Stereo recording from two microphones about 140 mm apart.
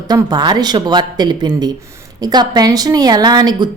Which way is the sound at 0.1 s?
30° right (ahead or behind).